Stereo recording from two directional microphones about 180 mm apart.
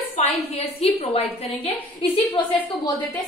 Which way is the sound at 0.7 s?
35° left (ahead or behind).